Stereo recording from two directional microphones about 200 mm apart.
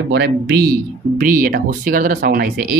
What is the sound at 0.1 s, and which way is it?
Speech, 50° right (ahead or behind).